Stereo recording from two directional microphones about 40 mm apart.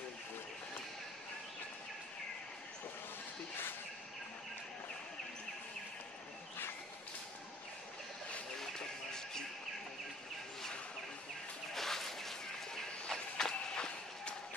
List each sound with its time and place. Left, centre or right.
8.5 s bird: centre
11.7 s a sound: centre
13.1 s walk: centre